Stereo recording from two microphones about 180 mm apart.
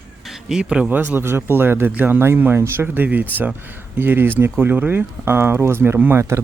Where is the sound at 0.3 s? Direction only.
Centre (ahead or behind).